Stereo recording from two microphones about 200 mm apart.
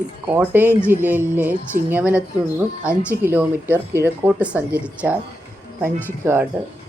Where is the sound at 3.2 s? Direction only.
10° right (ahead or behind).